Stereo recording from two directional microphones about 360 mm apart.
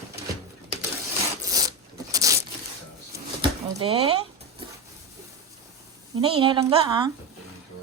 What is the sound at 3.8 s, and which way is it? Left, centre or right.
Speech, centre.